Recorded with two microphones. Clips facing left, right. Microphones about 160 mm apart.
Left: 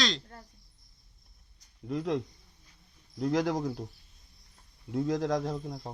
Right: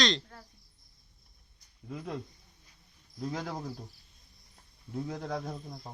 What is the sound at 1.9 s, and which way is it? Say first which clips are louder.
Speech: left 8 dB; 80° left.